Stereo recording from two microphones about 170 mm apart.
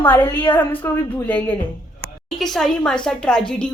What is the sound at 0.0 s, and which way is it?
A woman's voice, 10° left (ahead or behind).